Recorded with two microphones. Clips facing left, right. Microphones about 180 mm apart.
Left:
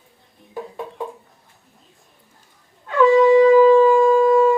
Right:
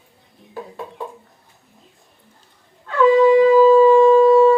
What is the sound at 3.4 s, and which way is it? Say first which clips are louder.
Shofar: even; 15° left (ahead or behind).